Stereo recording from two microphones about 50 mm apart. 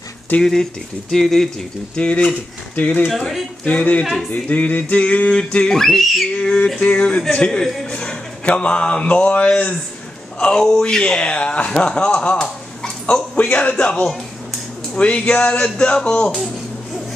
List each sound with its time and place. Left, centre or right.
0.4 s speech: centre
2.0 s speech: left
4.0 s speech: centre
4.3 s speech: left
5.8 s speech: centre
6.3 s speech: left
10.5 s speech: centre